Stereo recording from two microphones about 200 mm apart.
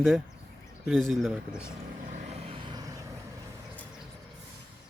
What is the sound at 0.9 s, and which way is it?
Speech, centre (ahead or behind).